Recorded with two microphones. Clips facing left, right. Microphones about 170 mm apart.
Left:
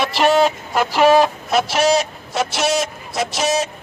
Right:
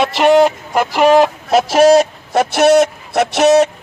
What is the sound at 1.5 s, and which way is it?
A man's voice, 40° right (ahead or behind).